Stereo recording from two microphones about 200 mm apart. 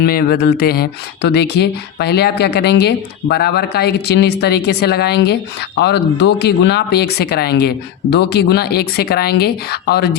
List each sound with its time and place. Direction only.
0.0 s speech: 50° left (ahead or behind)